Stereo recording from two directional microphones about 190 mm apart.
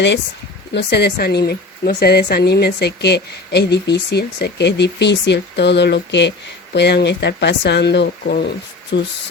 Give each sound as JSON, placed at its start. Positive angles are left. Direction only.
{"t": 0.7, "sound": "a woman's voice", "side_deg": 60}